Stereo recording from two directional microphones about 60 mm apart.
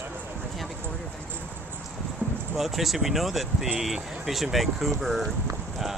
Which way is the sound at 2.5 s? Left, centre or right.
Centre.